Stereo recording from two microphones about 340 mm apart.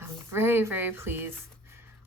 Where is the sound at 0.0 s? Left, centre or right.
Centre.